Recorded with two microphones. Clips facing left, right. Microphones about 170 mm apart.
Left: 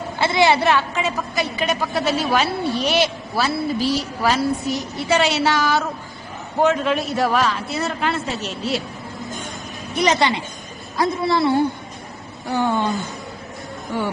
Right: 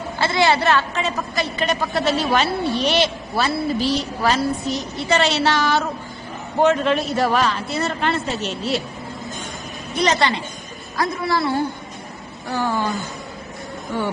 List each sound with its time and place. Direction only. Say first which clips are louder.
0.2 s a woman's voice: left 1 dB; 15° left (ahead or behind)
0.7 s a woman's voice: even; 5° left (ahead or behind)
4.6 s a woman's voice: even; 20° right (ahead or behind)
5.0 s a woman's voice: even; 5° left (ahead or behind)
10.0 s a woman's voice: left 1 dB; 15° left (ahead or behind)